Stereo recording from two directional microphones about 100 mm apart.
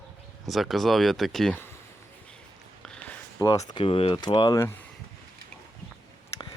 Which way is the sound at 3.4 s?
35° left (ahead or behind).